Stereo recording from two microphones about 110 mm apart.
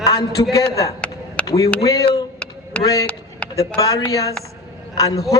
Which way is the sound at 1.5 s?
30° left (ahead or behind).